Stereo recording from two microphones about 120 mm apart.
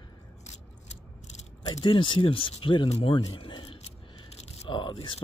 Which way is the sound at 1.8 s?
45° left (ahead or behind).